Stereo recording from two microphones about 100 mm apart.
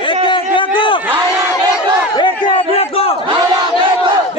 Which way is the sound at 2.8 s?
80° left.